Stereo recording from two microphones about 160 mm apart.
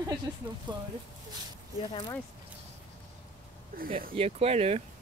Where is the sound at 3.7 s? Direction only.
65° right (ahead or behind).